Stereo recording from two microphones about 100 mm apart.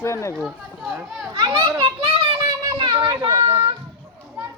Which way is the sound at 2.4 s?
40° right (ahead or behind).